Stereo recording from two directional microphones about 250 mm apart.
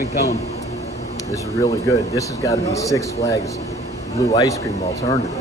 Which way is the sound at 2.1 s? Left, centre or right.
Centre.